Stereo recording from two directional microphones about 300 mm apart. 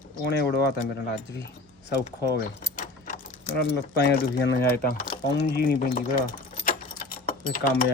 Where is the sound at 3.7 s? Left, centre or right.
Left.